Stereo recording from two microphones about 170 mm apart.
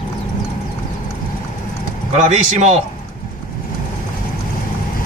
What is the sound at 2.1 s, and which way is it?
Speech, 40° right (ahead or behind).